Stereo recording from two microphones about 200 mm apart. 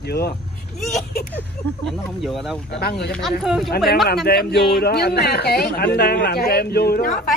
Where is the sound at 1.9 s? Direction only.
Centre (ahead or behind).